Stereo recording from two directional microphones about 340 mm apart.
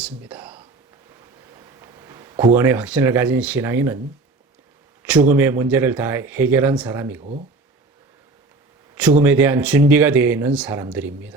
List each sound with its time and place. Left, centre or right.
0.0 s speech: centre
1.5 s a sound: centre
2.6 s speech: centre
5.0 s speech: centre
7.2 s speech: centre
9.2 s speech: centre